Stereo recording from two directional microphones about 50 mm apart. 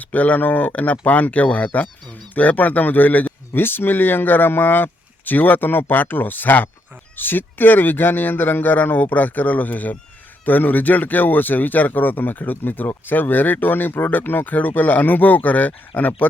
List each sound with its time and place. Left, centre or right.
0.0 s speech: left
3.6 s speech: left